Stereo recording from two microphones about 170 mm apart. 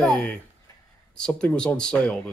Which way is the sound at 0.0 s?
Centre (ahead or behind).